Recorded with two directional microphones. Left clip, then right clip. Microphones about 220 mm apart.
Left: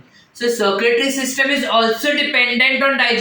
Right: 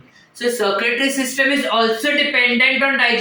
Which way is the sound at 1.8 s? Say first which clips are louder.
Left 2 dB; 15° left (ahead or behind).